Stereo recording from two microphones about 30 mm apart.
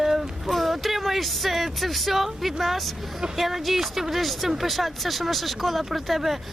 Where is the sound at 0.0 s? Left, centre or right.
Centre.